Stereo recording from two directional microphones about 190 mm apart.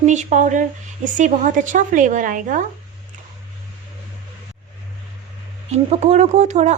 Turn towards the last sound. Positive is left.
turn(degrees=-40)  # may be behind; listen again after turning